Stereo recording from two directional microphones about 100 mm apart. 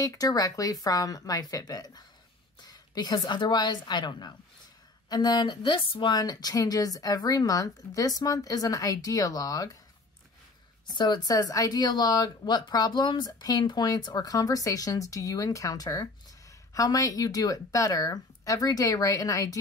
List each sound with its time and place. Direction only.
0.0 s a woman's voice: 35° left (ahead or behind)
10.9 s speech: 45° left (ahead or behind)